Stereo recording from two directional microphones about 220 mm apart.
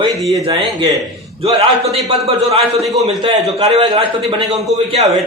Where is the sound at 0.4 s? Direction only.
20° right (ahead or behind).